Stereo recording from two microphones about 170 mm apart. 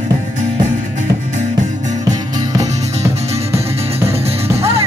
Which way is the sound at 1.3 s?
45° right (ahead or behind).